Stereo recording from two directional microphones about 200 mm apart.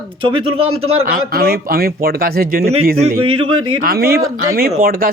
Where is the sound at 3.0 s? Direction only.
30° right (ahead or behind).